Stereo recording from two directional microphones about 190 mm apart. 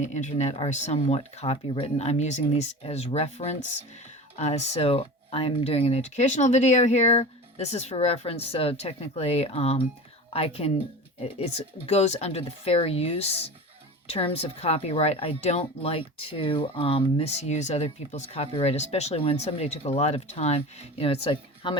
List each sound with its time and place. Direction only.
0.0 s speech: 40° left (ahead or behind)